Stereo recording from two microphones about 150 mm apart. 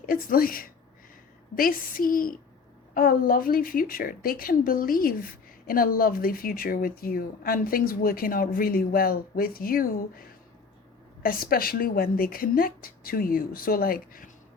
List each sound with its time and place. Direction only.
0.0 s a woman's voice: 70° left (ahead or behind)